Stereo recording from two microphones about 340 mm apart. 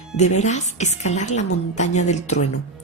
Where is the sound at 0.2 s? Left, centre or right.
Centre.